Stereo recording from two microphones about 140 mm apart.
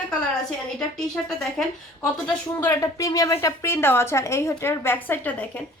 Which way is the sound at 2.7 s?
25° left (ahead or behind).